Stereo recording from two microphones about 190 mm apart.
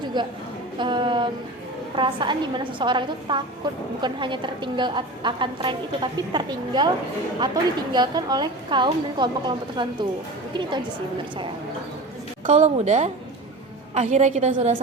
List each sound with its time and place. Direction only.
0.0 s a sound: 25° right (ahead or behind)
0.8 s a woman's voice: 25° right (ahead or behind)
12.5 s a woman's voice: 40° right (ahead or behind)